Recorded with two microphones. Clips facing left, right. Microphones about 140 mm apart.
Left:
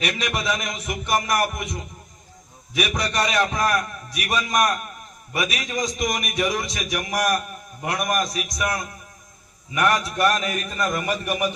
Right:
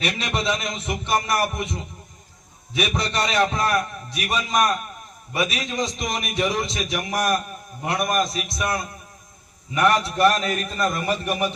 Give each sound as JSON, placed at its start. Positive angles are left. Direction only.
{"t": 0.0, "sound": "music", "side_deg": -30}
{"t": 9.9, "sound": "a man's voice", "side_deg": -30}